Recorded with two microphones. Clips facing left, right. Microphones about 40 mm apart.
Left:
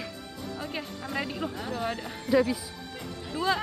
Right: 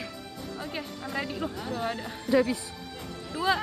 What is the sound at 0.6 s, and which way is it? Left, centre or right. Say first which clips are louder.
Speech: even; centre.